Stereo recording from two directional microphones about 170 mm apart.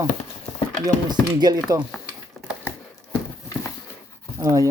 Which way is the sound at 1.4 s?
20° right (ahead or behind).